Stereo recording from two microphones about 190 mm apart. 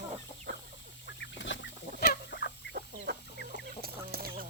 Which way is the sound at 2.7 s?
50° right (ahead or behind).